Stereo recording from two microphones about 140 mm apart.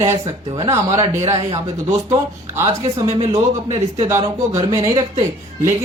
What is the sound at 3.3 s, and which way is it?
Speech, 20° right (ahead or behind).